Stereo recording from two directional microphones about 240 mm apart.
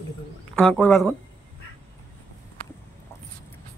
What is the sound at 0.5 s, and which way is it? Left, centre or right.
Speech, centre.